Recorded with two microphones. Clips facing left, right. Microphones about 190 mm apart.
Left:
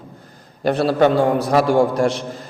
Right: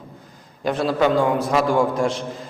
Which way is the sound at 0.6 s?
70° left (ahead or behind).